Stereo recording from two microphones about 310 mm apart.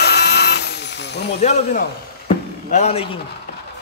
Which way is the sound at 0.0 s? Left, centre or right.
Left.